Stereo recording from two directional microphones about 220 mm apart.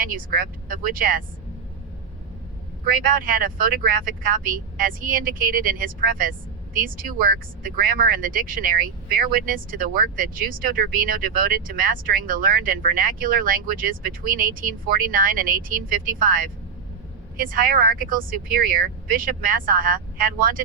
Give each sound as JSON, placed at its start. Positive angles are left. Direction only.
{"t": 0.2, "sound": "speech", "side_deg": -40}
{"t": 2.8, "sound": "speech", "side_deg": -40}